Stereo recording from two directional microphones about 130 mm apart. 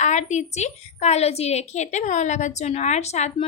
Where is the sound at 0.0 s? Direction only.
65° left (ahead or behind).